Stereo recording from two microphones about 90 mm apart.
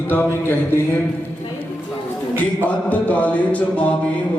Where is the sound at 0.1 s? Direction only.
25° left (ahead or behind).